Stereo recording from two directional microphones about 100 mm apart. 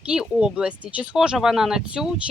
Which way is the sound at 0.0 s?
10° right (ahead or behind).